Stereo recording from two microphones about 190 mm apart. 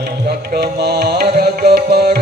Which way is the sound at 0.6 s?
60° right (ahead or behind).